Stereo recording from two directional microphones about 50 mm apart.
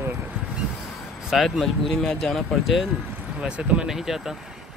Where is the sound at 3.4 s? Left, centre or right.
Right.